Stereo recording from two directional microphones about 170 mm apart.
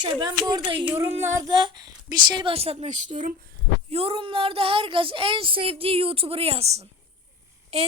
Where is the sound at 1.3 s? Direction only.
25° right (ahead or behind); by 3.3 s 50° right (ahead or behind).